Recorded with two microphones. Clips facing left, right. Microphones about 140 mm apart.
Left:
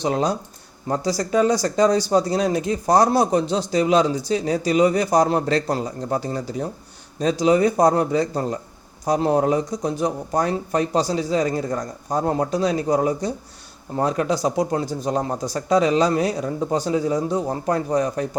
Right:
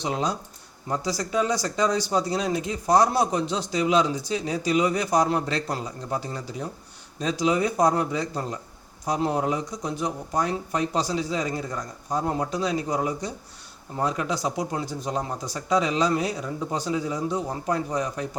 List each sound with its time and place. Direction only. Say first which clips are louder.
0.0 s speech: left 6 dB; 40° left (ahead or behind)